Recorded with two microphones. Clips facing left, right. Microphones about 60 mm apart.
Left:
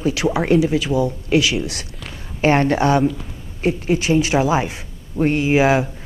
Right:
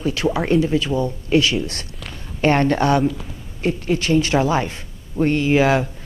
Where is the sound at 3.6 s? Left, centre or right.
Centre.